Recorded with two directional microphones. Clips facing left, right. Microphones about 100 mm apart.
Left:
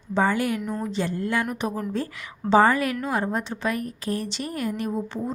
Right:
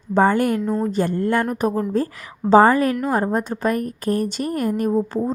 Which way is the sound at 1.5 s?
40° right (ahead or behind).